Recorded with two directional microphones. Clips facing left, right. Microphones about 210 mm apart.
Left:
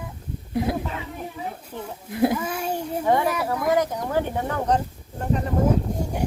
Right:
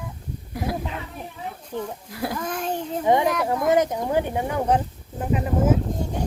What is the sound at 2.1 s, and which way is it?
Speech, 25° left (ahead or behind).